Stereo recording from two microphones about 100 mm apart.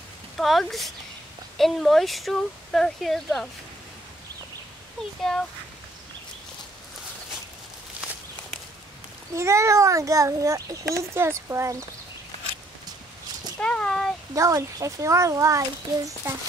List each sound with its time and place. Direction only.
0.4 s speech: centre (ahead or behind)
5.3 s speech: 5° left (ahead or behind)
9.3 s a child's voice: 30° right (ahead or behind)
13.6 s a sound: 10° left (ahead or behind)
14.3 s a child's voice: 30° right (ahead or behind)